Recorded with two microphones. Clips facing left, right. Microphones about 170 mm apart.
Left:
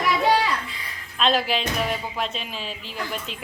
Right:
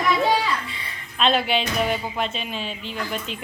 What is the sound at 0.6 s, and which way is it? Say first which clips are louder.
Speech: right 1 dB; centre (ahead or behind).